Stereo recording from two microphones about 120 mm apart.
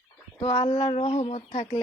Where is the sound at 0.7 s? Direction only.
50° left (ahead or behind).